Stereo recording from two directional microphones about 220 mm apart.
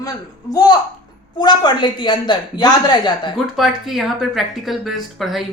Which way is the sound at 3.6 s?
Centre (ahead or behind).